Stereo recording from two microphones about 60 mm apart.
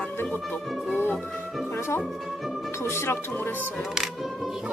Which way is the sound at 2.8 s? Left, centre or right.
Left.